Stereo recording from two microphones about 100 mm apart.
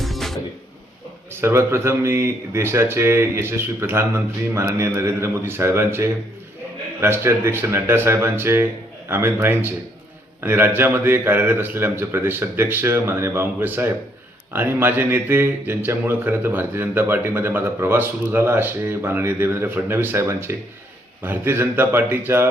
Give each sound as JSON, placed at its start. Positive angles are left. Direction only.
{"t": 0.0, "sound": "music", "side_deg": 0}
{"t": 1.3, "sound": "speech", "side_deg": -25}